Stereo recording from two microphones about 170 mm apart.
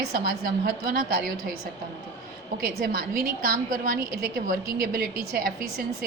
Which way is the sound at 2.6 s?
60° right (ahead or behind).